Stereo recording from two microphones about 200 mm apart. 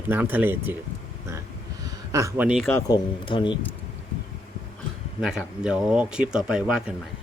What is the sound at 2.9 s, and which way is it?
Speech, 25° left (ahead or behind).